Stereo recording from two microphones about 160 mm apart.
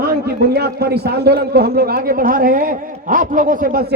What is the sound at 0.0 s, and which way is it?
A man's voice, 80° right.